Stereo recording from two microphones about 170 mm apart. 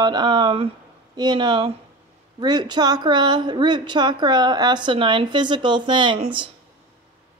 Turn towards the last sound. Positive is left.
turn(degrees=-30)  # may be behind; listen again after turning